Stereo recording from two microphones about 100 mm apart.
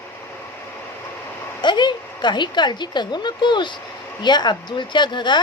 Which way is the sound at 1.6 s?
50° left (ahead or behind).